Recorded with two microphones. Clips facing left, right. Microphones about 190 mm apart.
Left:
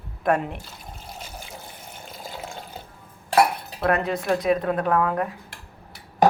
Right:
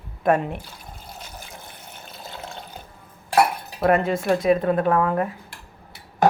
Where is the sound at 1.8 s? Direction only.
10° left (ahead or behind).